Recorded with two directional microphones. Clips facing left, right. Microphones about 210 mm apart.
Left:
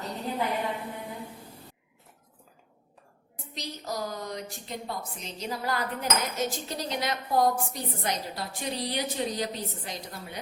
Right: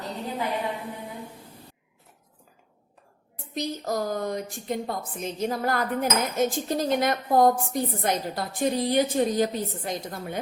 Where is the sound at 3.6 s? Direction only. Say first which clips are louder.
Right 7 dB; 50° right (ahead or behind).